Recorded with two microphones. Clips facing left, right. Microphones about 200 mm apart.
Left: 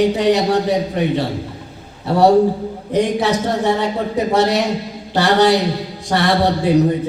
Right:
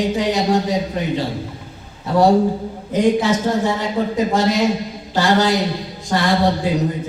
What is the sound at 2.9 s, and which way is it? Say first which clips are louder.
A man's voice: right 1 dB; 70° left (ahead or behind).